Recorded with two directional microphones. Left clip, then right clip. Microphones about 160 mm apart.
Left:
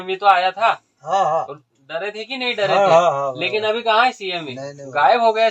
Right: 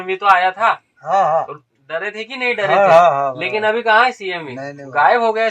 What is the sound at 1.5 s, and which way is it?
Speech, 20° right (ahead or behind).